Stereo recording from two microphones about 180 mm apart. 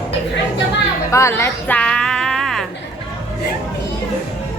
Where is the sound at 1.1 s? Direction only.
15° left (ahead or behind).